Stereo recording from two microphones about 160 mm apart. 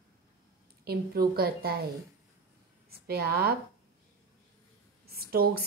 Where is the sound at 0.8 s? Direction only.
75° right (ahead or behind).